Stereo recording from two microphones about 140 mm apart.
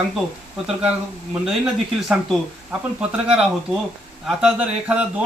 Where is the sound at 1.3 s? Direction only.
5° right (ahead or behind).